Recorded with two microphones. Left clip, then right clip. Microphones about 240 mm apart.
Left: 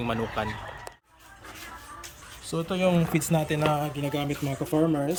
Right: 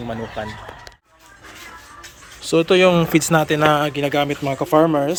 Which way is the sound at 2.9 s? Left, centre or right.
Centre.